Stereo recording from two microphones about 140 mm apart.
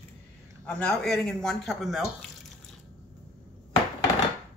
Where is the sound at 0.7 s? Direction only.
5° left (ahead or behind).